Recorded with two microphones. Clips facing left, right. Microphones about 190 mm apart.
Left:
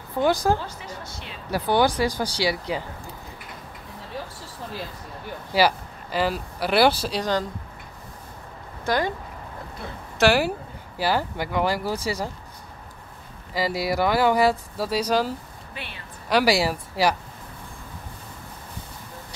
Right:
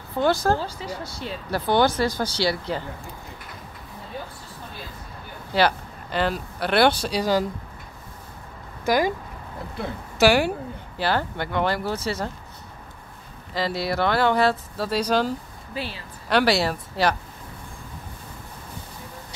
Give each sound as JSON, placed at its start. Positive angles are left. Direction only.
{"t": 0.2, "sound": "speech", "side_deg": 15}
{"t": 0.7, "sound": "speech", "side_deg": -35}
{"t": 1.5, "sound": "speech", "side_deg": 10}
{"t": 5.5, "sound": "speech", "side_deg": 5}
{"t": 8.8, "sound": "speech", "side_deg": -10}
{"t": 10.1, "sound": "a woman's voice", "side_deg": 0}
{"t": 13.6, "sound": "speech", "side_deg": 5}
{"t": 15.7, "sound": "a woman's voice", "side_deg": -30}
{"t": 16.3, "sound": "speech", "side_deg": 5}